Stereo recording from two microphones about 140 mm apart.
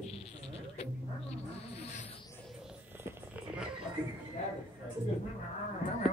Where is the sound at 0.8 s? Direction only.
45° left (ahead or behind).